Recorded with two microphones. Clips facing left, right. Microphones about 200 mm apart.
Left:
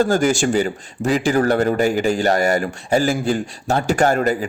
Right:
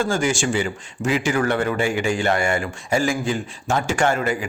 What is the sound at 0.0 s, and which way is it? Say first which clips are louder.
A man's voice: left 5 dB; 40° left (ahead or behind).